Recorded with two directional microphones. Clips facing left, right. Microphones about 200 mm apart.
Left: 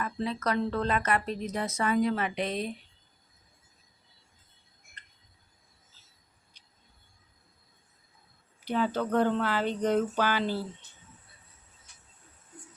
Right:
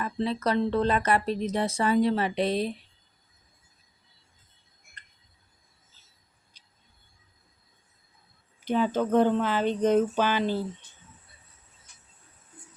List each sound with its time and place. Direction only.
0.0 s speech: 30° right (ahead or behind)
8.6 s speech: 20° right (ahead or behind)